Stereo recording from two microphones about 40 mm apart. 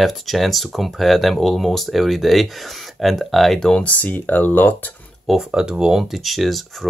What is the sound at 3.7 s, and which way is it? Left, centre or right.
Speech, left.